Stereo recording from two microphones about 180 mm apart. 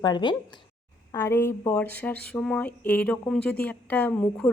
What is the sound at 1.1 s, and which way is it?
Speech, 15° left (ahead or behind).